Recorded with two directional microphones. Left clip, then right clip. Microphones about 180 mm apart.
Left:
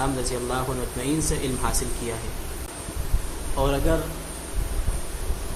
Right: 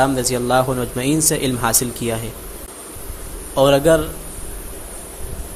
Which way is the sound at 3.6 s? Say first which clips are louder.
Right 12 dB; 45° right (ahead or behind).